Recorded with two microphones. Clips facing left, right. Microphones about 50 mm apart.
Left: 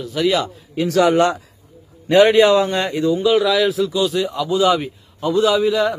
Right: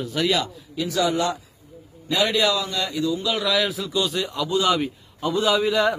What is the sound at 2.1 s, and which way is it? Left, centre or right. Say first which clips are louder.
A man's voice: left 10 dB; left.